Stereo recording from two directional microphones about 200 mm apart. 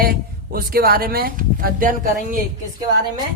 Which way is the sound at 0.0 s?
45° right (ahead or behind).